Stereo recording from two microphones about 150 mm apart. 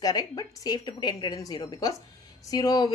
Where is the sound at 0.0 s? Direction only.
25° left (ahead or behind).